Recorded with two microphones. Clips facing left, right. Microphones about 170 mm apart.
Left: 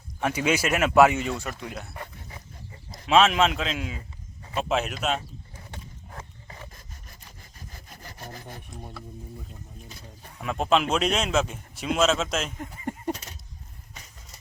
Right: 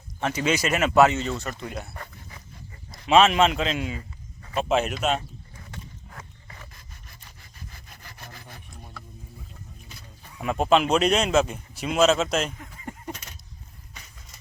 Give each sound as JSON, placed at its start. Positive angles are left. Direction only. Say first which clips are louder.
{"t": 0.2, "sound": "speech", "louder": "even", "side_deg": 10}
{"t": 2.3, "sound": "wild animals", "louder": "left 2 dB", "side_deg": 30}
{"t": 3.1, "sound": "speech", "louder": "right 2 dB", "side_deg": 0}
{"t": 5.5, "sound": "a sound", "louder": "right 2 dB", "side_deg": 30}
{"t": 6.7, "sound": "sawing", "louder": "left 1 dB", "side_deg": 40}
{"t": 7.7, "sound": "wood", "louder": "left 3 dB", "side_deg": 40}
{"t": 10.4, "sound": "speech", "louder": "right 3 dB", "side_deg": 0}
{"t": 12.5, "sound": "coin", "louder": "left 6 dB", "side_deg": 35}